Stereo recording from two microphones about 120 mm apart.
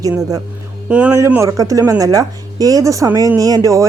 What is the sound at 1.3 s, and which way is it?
Speech, 25° right (ahead or behind).